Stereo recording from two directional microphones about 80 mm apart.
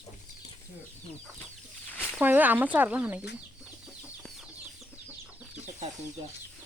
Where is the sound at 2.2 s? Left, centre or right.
Right.